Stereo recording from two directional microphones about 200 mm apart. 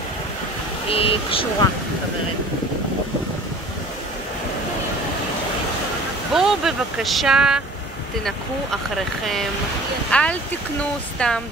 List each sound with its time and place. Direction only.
0.8 s speech: 30° left (ahead or behind)
6.3 s speech: centre (ahead or behind)
10.1 s speech: 5° left (ahead or behind)